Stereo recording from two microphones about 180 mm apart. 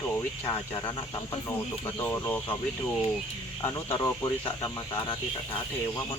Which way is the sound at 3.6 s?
15° left (ahead or behind).